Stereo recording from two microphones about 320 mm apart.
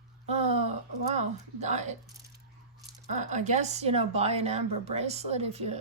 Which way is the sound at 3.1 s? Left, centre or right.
Right.